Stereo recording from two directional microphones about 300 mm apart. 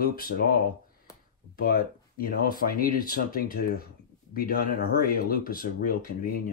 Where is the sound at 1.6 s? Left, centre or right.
Left.